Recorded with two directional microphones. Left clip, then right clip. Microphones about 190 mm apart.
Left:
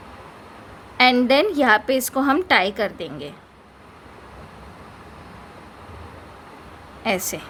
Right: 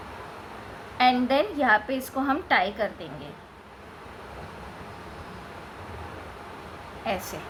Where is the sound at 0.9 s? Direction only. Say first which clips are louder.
Left 6 dB; 60° left (ahead or behind).